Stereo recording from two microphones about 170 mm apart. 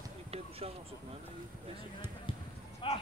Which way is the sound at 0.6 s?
35° right (ahead or behind).